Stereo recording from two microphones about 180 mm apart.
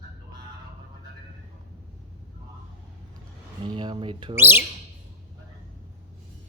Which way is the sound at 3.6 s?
25° right (ahead or behind).